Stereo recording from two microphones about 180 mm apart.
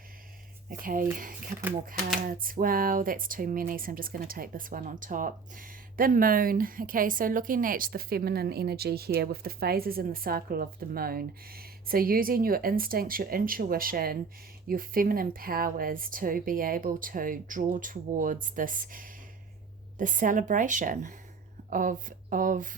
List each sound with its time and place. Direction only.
0.8 s speech: 50° right (ahead or behind)
2.2 s speech: 50° right (ahead or behind)